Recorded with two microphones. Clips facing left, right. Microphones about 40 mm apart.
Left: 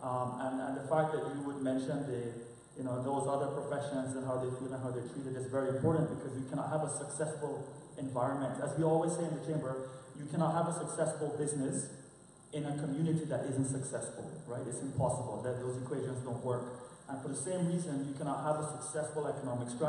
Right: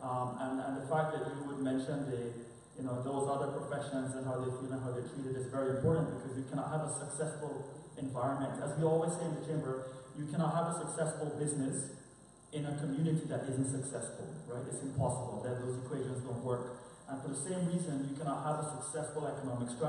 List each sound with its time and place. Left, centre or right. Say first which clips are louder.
0.0 s a sound: left 1 dB; centre
1.9 s a man's voice: left 1 dB; centre
13.5 s a man's voice: left 1 dB; centre
15.0 s a man's voice: left 3 dB; centre